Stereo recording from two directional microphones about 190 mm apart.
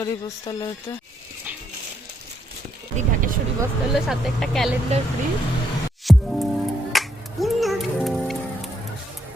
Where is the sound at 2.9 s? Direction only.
45° right (ahead or behind).